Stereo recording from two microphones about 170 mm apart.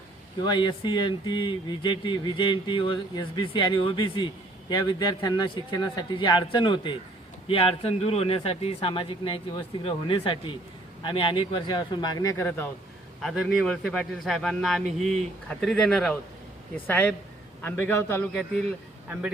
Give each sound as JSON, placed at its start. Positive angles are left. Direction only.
{"t": 0.4, "sound": "speech", "side_deg": 25}
{"t": 13.2, "sound": "a man's voice", "side_deg": 0}